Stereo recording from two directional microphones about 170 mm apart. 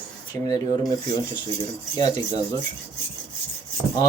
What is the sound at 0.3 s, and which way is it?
Speech, 20° left (ahead or behind).